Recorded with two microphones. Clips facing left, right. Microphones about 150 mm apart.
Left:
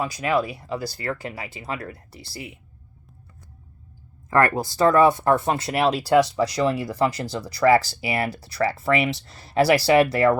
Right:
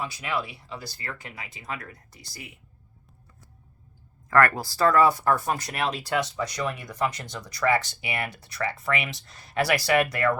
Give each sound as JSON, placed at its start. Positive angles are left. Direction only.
{"t": 0.0, "sound": "speech", "side_deg": 40}
{"t": 4.3, "sound": "speech", "side_deg": 20}